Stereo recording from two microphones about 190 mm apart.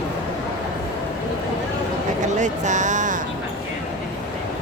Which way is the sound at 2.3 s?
40° right (ahead or behind).